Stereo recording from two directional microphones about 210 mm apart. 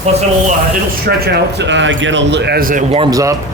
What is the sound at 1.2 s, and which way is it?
A man's voice, 50° right (ahead or behind).